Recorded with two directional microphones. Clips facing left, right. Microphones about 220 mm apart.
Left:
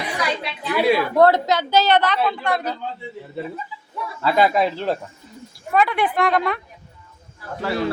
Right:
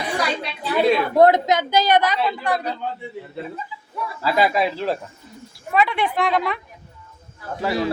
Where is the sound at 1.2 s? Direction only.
15° right (ahead or behind).